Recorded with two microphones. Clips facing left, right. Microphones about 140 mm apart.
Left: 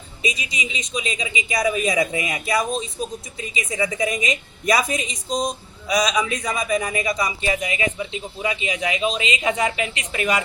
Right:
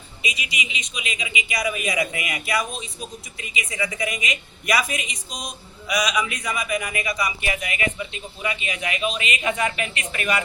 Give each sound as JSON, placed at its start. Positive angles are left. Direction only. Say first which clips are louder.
{"t": 0.2, "sound": "a man's voice", "louder": "left 3 dB", "side_deg": 35}
{"t": 5.9, "sound": "a man's voice", "louder": "left 3 dB", "side_deg": 25}